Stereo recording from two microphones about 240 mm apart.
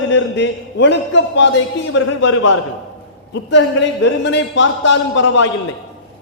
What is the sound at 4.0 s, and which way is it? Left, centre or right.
A man's voice, left.